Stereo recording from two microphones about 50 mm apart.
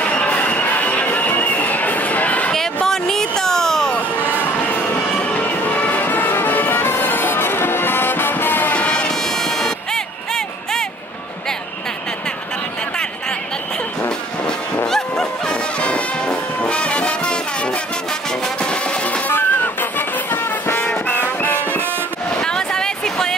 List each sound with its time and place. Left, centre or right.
0.0 s music: left
2.5 s a sound: centre
5.3 s music: left
8.7 s vehicle: left
9.4 s music: centre
14.9 s music: centre
18.6 s music: left
19.2 s music: left
22.3 s a sound: centre